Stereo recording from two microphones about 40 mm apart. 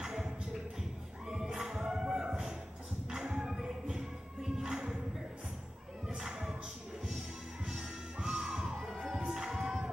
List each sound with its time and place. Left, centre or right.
0.0 s a sound: centre
0.7 s music: centre
6.1 s music: centre
7.6 s music: centre